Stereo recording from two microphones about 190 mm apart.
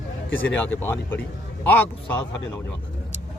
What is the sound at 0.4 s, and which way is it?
A man's voice, 10° left (ahead or behind).